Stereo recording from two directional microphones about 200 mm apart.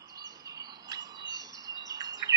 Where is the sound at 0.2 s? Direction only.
20° right (ahead or behind).